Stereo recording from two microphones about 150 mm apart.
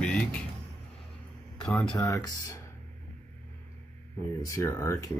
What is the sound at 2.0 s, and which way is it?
Speech, 25° left (ahead or behind).